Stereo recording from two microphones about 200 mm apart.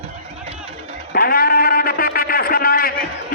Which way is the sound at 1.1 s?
50° left (ahead or behind).